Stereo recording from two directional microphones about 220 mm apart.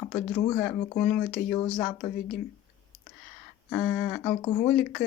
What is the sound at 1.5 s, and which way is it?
Speech, 15° left (ahead or behind).